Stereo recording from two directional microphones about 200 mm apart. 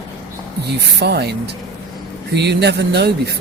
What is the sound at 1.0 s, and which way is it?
Speech, 55° right (ahead or behind).